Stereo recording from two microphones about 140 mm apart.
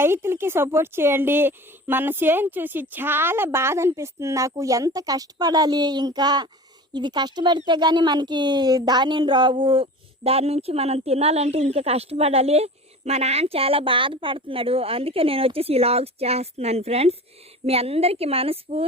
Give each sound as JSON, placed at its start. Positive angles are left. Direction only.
{"t": 0.0, "sound": "speech", "side_deg": -15}